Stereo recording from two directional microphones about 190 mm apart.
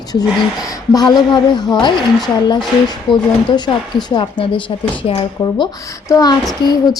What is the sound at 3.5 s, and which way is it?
Speech, 20° left (ahead or behind).